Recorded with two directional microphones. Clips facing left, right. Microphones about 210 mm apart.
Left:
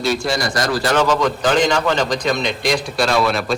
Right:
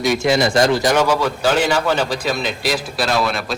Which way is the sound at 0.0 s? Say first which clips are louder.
Right 4 dB; 20° right (ahead or behind).